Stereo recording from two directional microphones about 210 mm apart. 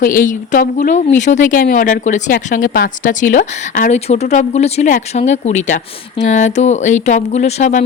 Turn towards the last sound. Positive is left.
turn(degrees=35)  # may be behind; listen again after turning